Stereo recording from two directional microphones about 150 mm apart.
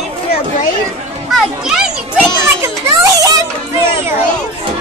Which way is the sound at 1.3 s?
5° right (ahead or behind).